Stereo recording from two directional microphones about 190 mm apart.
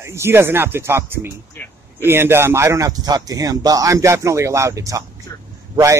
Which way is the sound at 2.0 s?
10° right (ahead or behind).